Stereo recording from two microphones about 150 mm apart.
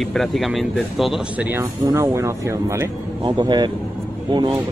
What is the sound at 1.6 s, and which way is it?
Speech, 20° right (ahead or behind).